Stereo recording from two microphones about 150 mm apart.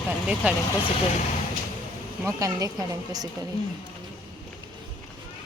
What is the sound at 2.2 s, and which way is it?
Speech, 25° right (ahead or behind).